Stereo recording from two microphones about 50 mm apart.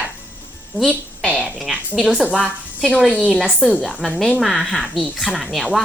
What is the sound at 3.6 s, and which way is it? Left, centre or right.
A woman's voice, centre.